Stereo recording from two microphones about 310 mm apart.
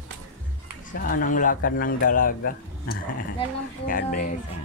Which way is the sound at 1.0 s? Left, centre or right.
Left.